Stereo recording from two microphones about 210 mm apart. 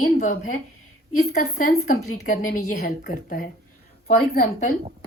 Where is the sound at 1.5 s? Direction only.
40° left (ahead or behind).